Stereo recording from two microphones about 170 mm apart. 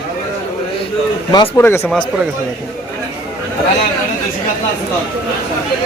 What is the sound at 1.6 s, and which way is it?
Speech, 15° left (ahead or behind).